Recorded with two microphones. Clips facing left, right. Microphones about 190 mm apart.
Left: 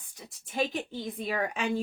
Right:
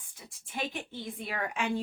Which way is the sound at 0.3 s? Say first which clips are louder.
Left 6 dB; 40° left (ahead or behind).